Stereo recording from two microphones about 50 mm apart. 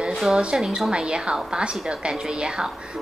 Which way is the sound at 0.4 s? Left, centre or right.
Right.